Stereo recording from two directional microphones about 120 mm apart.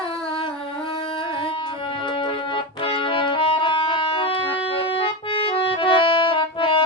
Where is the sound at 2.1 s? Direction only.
45° left (ahead or behind).